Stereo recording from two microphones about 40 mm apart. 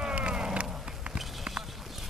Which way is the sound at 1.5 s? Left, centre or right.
Right.